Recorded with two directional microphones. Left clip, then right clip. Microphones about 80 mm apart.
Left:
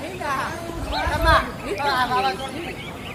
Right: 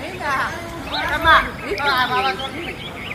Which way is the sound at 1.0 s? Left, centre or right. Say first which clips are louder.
Right 5 dB; left.